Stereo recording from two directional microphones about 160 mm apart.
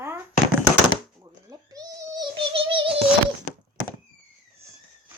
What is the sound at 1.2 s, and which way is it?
Babbling, 20° right (ahead or behind).